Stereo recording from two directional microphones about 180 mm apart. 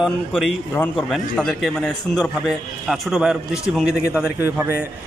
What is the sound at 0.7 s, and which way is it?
A man's voice, 5° left (ahead or behind).